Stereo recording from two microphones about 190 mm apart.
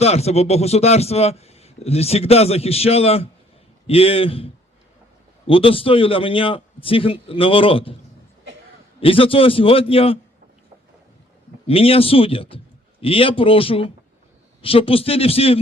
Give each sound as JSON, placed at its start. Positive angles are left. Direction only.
{"t": 0.0, "sound": "a man's voice", "side_deg": 35}
{"t": 9.0, "sound": "a man's voice", "side_deg": 30}
{"t": 11.6, "sound": "a man's voice", "side_deg": 30}